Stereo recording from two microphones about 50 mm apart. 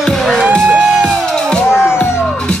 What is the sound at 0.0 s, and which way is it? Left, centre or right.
Music, centre.